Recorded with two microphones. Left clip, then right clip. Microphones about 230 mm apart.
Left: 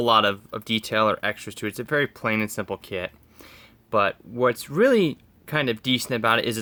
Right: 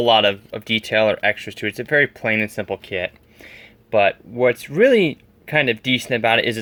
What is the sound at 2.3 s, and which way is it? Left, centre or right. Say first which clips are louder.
Speech: right 5 dB; centre.